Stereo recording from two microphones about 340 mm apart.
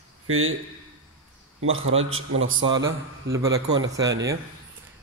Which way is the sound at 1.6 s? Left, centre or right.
Right.